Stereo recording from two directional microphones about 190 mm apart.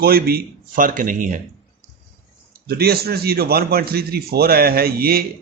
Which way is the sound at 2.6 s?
55° right (ahead or behind).